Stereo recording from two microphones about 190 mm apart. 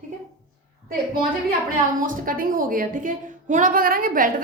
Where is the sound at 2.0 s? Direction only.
45° right (ahead or behind).